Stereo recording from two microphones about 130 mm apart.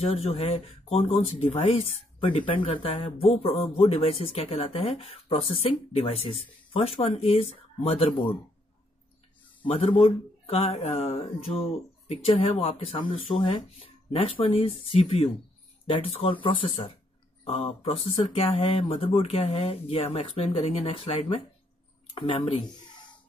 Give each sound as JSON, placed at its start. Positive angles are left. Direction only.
{"t": 0.0, "sound": "speech", "side_deg": 50}
{"t": 2.1, "sound": "speech", "side_deg": 40}
{"t": 9.6, "sound": "speech", "side_deg": 50}